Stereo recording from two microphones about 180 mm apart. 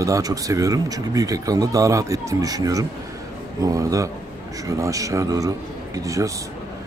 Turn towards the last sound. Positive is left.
turn(degrees=-20)  # may be behind; listen again after turning